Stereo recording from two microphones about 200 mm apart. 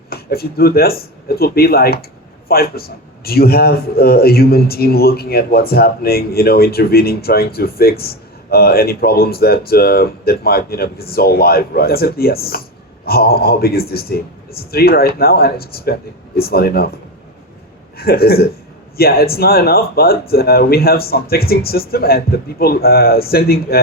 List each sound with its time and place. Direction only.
0.1 s a man's voice: 50° left (ahead or behind)
17.9 s a man's voice: 50° left (ahead or behind)